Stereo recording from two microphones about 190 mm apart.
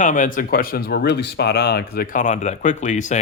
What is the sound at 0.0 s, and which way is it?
Speech, 40° left (ahead or behind).